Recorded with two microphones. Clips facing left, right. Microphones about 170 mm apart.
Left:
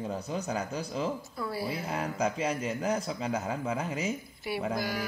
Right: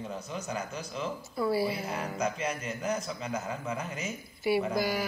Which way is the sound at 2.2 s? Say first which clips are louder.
Left 3 dB; 30° left (ahead or behind).